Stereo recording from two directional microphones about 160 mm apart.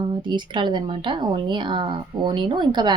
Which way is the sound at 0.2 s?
30° right (ahead or behind).